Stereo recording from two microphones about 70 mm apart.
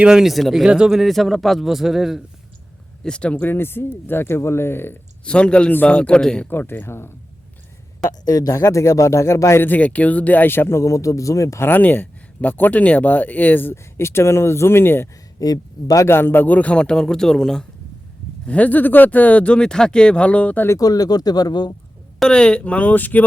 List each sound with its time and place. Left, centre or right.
0.0 s a man's voice: centre
3.0 s speech: centre; by 4.9 s left
5.2 s a man's voice: centre
6.5 s speech: left
8.0 s speech: left
9.6 s speech: left
11.6 s speech: left
15.4 s speech: left
16.0 s a man's voice: left; by 17.7 s centre
18.4 s speech: left
20.7 s speech: left
22.2 s speech: centre